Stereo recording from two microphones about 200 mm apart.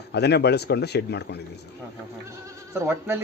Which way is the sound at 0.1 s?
55° left (ahead or behind).